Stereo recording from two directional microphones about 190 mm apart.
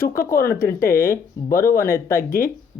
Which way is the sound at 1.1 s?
15° left (ahead or behind).